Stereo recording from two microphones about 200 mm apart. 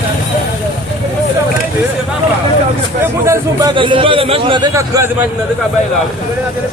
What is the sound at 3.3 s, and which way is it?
A man's voice, 20° right (ahead or behind).